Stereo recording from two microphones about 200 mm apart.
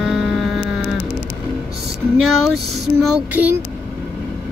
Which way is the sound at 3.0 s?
5° right (ahead or behind).